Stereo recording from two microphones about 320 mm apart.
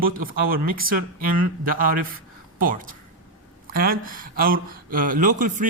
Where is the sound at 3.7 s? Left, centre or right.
Right.